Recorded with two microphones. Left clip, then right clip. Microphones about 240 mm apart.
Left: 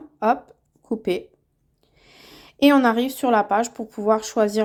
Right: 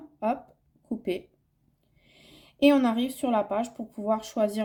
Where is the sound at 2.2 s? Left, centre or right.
Centre.